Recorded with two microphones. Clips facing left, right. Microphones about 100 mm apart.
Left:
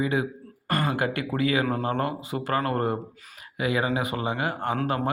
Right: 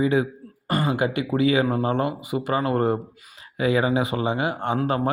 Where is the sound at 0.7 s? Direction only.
15° right (ahead or behind).